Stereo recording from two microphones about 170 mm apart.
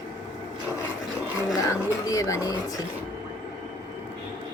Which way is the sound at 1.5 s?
20° left (ahead or behind).